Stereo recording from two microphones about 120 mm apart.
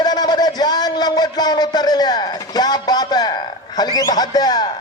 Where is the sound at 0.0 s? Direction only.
35° left (ahead or behind).